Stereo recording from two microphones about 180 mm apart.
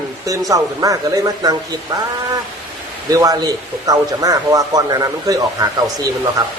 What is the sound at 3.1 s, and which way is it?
Speech, 20° right (ahead or behind).